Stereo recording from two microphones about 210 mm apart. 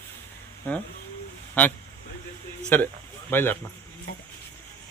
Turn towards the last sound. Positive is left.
turn(degrees=10)  # may be behind; listen again after turning